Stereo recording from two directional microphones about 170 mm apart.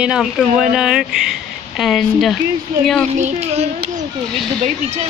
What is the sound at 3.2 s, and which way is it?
Speech, 40° right (ahead or behind).